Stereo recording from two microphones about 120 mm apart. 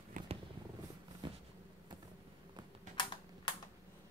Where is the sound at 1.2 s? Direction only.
40° right (ahead or behind).